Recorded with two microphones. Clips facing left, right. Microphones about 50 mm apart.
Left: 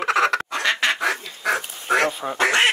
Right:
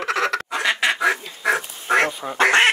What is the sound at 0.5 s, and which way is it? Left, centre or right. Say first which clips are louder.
Quack: right 1 dB; centre.